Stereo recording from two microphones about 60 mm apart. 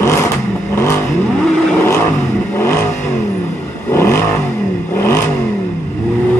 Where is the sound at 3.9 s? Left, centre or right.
Left.